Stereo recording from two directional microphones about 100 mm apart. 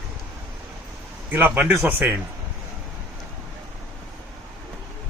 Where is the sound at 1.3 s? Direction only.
20° right (ahead or behind).